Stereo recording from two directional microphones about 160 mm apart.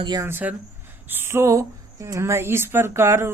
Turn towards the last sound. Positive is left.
turn(degrees=-15)  # may be behind; listen again after turning